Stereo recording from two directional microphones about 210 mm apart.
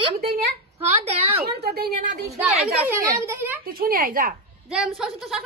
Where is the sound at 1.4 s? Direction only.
50° right (ahead or behind).